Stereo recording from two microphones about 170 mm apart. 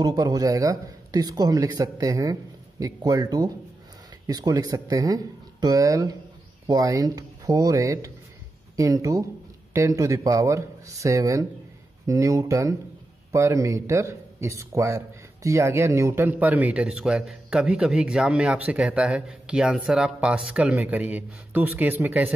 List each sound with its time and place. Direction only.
0.0 s speech: 20° right (ahead or behind)